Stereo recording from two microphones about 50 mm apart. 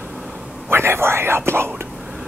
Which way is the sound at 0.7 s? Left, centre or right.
Right.